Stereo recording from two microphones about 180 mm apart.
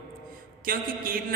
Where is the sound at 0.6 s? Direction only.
50° right (ahead or behind).